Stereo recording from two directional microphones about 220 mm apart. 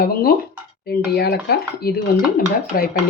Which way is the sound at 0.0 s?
45° left (ahead or behind).